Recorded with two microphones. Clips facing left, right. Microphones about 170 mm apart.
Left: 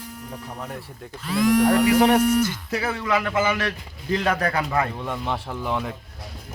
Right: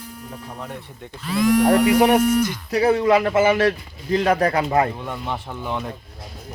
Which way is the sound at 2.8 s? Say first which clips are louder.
Right 9 dB; 30° right (ahead or behind).